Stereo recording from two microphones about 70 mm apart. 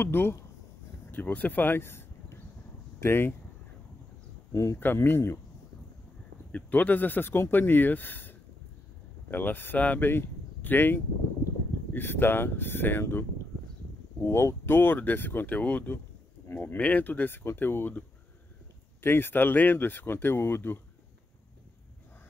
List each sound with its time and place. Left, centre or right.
0.0 s speech: left
4.5 s speech: left
4.7 s speech: left
6.5 s speech: left